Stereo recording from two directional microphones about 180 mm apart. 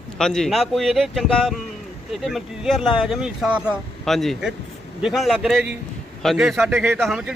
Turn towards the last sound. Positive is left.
turn(degrees=0)  # may be behind; listen again after turning